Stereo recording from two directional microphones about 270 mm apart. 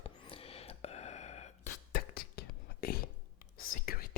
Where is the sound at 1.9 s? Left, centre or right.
Left.